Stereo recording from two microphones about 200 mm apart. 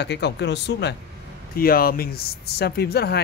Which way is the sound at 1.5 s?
45° left (ahead or behind).